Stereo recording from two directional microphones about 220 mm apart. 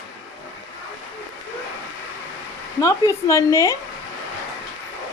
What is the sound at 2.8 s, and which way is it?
Speech, 15° left (ahead or behind).